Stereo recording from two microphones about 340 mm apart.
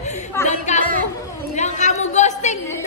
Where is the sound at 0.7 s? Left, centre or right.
Left.